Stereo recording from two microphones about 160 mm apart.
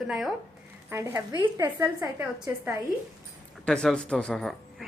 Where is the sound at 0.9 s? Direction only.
20° right (ahead or behind).